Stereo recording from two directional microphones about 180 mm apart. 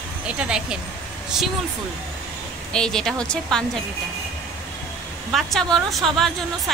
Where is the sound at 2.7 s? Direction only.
5° left (ahead or behind).